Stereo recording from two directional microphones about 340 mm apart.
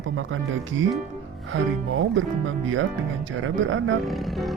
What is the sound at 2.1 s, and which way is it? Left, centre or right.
Speech, right.